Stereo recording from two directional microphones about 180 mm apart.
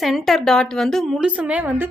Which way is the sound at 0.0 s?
Centre (ahead or behind).